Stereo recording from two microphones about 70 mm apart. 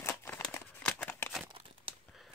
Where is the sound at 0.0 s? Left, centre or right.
Left.